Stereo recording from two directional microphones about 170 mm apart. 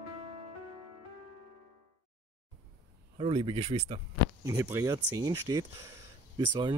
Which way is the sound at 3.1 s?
35° right (ahead or behind).